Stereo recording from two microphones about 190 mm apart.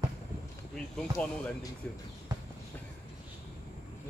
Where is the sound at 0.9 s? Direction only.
5° left (ahead or behind).